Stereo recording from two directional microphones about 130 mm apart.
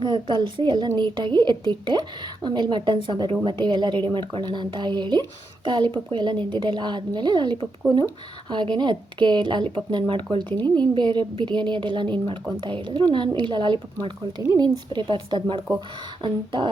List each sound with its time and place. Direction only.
0.0 s a woman's voice: 35° right (ahead or behind)
10.5 s a woman's voice: 15° left (ahead or behind)
10.9 s a woman's voice: 35° right (ahead or behind)